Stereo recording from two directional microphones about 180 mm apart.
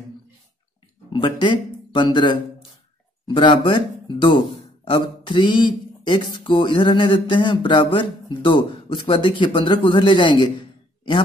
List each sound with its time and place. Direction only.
1.1 s speech: 25° left (ahead or behind)